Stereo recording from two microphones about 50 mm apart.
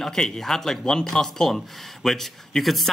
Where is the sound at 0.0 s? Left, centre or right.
Centre.